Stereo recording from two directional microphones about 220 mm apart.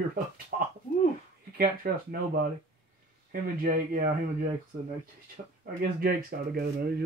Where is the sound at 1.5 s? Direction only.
40° right (ahead or behind).